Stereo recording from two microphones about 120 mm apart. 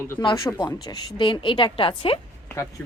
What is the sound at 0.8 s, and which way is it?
A woman's voice, 40° left (ahead or behind).